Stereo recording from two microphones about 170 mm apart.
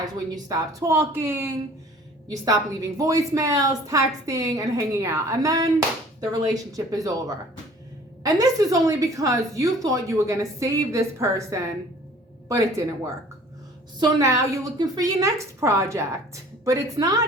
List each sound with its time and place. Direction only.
0.0 s a woman's voice: 20° right (ahead or behind)
14.0 s a woman's voice: 20° right (ahead or behind)